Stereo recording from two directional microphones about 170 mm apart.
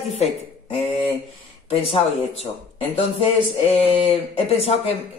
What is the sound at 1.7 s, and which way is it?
Speech, 35° left (ahead or behind).